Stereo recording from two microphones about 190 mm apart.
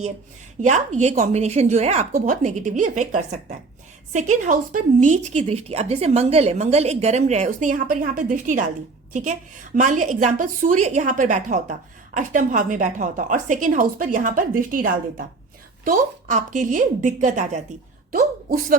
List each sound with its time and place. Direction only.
0.6 s a woman's voice: 40° right (ahead or behind)
9.7 s a woman's voice: 40° right (ahead or behind)